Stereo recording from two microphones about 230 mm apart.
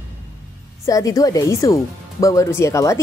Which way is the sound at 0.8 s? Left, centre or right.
Centre.